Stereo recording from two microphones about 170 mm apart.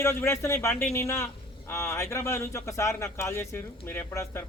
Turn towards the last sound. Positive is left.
turn(degrees=15)  # may be behind; listen again after turning